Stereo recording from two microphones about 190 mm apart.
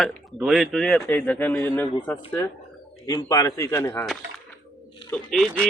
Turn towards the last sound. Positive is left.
turn(degrees=0)  # may be behind; listen again after turning